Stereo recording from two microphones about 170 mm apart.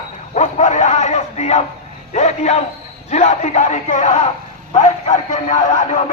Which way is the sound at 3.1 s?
40° left (ahead or behind).